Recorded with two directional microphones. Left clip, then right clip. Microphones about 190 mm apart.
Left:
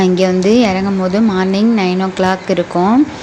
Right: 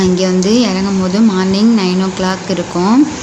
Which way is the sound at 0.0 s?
30° left (ahead or behind).